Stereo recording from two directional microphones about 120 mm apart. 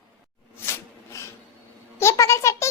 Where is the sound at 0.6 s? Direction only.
20° left (ahead or behind).